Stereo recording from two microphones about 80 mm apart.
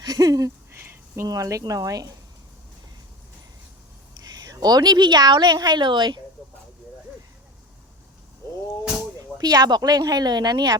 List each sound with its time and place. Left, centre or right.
0.0 s speech: right
0.7 s a sound: right
1.3 s speech: right
4.2 s a woman's voice: right
9.1 s speech: right